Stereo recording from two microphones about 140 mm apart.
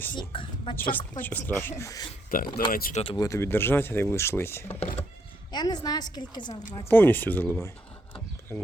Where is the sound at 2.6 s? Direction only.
90° left.